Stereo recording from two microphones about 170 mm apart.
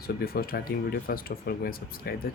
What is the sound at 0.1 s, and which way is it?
Speech, 65° left (ahead or behind).